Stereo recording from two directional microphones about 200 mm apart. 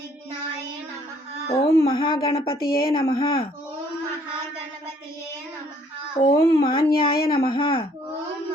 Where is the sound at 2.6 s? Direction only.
50° left (ahead or behind).